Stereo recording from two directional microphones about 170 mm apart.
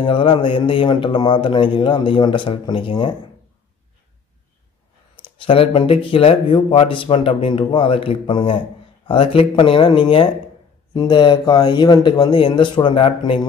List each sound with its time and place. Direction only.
0.0 s speech: 30° left (ahead or behind)
5.1 s speech: 30° left (ahead or behind)